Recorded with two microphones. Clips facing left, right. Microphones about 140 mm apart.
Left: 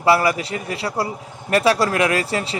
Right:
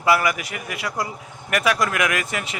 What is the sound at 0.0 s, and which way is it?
A man's voice, 30° left (ahead or behind).